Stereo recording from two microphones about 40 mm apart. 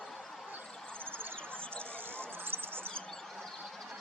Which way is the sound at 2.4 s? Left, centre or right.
Right.